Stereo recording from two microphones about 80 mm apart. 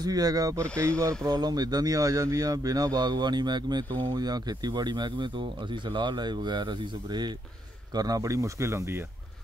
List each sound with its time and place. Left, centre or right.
0.0 s speech: right
7.9 s speech: right